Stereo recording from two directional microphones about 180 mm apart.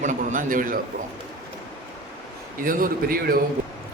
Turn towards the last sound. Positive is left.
turn(degrees=-55)  # may be behind; listen again after turning